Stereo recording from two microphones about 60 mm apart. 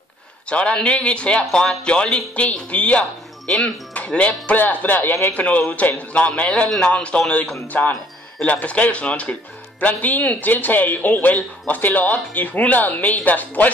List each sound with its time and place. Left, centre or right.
0.5 s speech: centre
7.6 s speech: left